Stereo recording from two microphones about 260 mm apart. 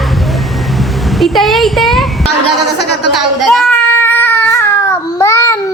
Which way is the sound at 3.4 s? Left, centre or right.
Centre.